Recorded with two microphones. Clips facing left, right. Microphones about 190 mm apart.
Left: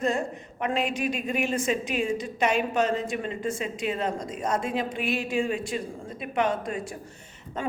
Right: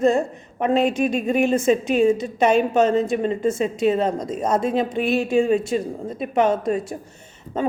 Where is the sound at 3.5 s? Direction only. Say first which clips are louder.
Right 10 dB; 40° right (ahead or behind).